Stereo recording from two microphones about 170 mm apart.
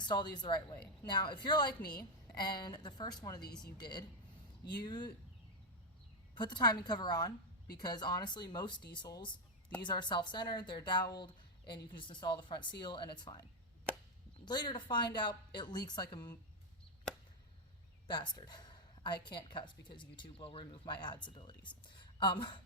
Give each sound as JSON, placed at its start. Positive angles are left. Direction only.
{"t": 0.0, "sound": "a woman's voice", "side_deg": 25}
{"t": 6.3, "sound": "a woman's voice", "side_deg": 25}
{"t": 14.4, "sound": "a woman's voice", "side_deg": 25}
{"t": 18.1, "sound": "a woman's voice", "side_deg": 25}